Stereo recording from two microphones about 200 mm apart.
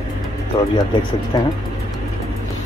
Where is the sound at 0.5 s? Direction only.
20° left (ahead or behind).